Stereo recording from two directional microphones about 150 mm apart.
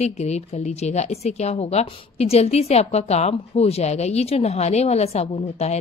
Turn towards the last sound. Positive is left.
turn(degrees=45)  # may be behind; listen again after turning